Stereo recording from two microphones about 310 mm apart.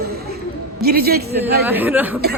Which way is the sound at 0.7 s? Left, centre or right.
Right.